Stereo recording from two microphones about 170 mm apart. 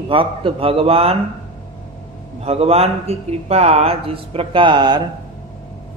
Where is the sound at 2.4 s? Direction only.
40° right (ahead or behind).